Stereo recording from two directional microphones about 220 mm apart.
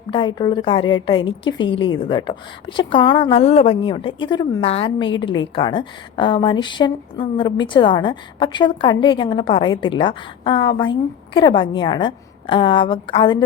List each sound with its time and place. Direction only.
0.1 s a woman's voice: 20° left (ahead or behind)